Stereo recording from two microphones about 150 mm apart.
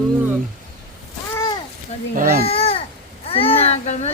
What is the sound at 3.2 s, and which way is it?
Speech, 40° left (ahead or behind).